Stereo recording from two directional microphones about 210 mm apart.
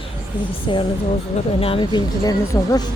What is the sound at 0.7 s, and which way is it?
Speech, 25° left (ahead or behind).